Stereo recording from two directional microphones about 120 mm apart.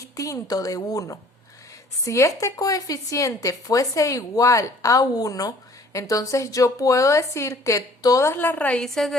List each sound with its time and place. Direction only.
0.0 s speech: 25° left (ahead or behind); by 9.1 s 5° left (ahead or behind)